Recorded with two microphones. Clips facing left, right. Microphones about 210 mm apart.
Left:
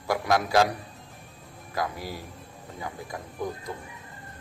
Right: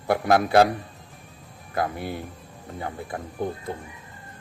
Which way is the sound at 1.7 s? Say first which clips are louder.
Right 4 dB; 55° right (ahead or behind).